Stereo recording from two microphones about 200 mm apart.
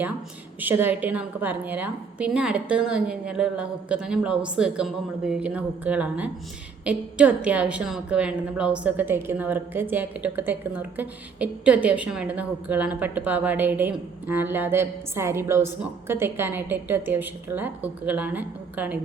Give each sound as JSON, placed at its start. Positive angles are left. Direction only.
{"t": 0.6, "sound": "a woman's voice", "side_deg": -10}